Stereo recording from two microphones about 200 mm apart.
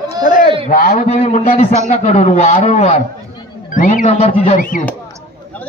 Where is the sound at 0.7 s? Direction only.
40° left (ahead or behind).